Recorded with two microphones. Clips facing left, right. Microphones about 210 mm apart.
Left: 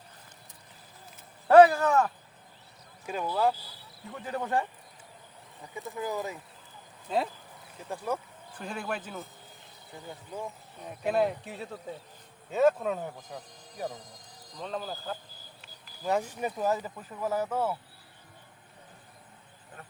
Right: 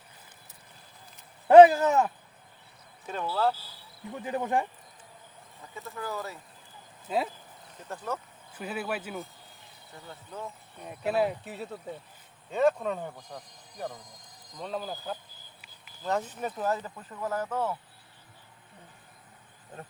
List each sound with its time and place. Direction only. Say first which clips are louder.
1.5 s speech: right 3 dB; 20° right (ahead or behind)
3.1 s speech: left 1 dB; 10° left (ahead or behind)
4.1 s speech: right 2 dB; 15° right (ahead or behind)
5.6 s speech: left 3 dB; 15° left (ahead or behind)
7.1 s speech: even; 5° right (ahead or behind)
7.8 s speech: left 2 dB; 10° left (ahead or behind)
8.5 s speech: right 2 dB; 5° right (ahead or behind)
10.1 s speech: left 2 dB; 15° left (ahead or behind)
10.8 s speech: even; 5° right (ahead or behind)
14.6 s speech: right 1 dB; 10° right (ahead or behind)
16.0 s speech: left 2 dB; 10° left (ahead or behind)